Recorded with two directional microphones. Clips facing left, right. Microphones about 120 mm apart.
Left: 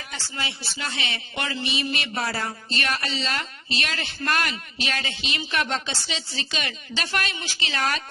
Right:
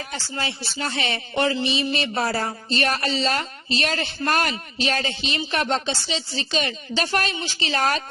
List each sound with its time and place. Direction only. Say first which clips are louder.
0.1 s speech: right 1 dB; 40° right (ahead or behind)
1.5 s speech: right 5 dB; 25° right (ahead or behind)